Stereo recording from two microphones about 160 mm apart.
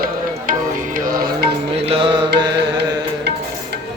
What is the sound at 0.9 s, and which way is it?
Music, 60° right (ahead or behind).